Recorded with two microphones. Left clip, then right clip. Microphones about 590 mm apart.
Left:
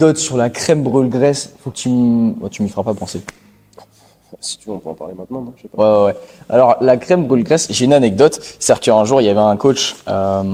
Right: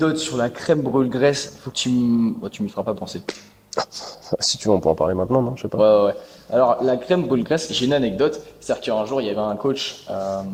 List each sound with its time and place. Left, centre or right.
0.0 s speech: left
4.3 s speech: right
5.7 s speech: left
8.6 s speech: left